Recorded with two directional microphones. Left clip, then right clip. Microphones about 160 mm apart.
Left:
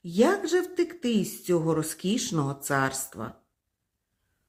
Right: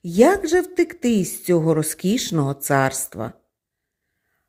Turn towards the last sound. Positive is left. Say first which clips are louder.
# right 7 dB
turn(degrees=-40)  # may be behind; listen again after turning